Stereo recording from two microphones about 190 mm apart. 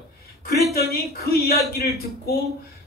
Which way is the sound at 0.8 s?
55° left (ahead or behind).